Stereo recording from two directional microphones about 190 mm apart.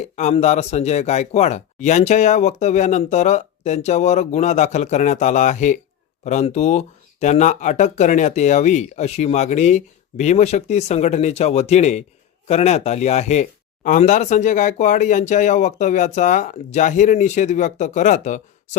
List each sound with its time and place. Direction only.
0.0 s speech: 35° left (ahead or behind)